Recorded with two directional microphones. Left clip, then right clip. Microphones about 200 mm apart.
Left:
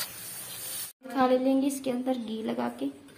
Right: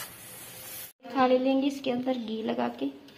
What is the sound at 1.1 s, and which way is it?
Speech, 5° left (ahead or behind).